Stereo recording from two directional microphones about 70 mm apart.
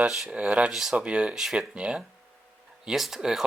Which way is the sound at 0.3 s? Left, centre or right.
Centre.